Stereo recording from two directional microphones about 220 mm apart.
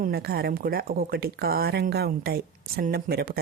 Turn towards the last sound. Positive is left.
turn(degrees=-45)  # may be behind; listen again after turning